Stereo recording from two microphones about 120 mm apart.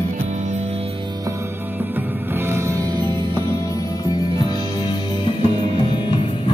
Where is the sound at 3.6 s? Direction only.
30° left (ahead or behind).